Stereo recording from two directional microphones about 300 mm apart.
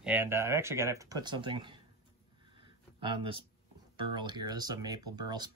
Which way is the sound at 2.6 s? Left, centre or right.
Centre.